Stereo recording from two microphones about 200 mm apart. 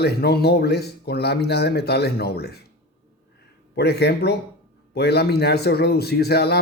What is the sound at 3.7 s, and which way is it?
A man's voice, 55° left (ahead or behind).